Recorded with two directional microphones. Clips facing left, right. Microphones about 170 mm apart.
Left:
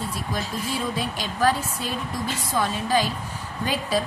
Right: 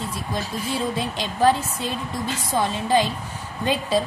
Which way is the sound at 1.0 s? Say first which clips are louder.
Right 3 dB; 25° right (ahead or behind).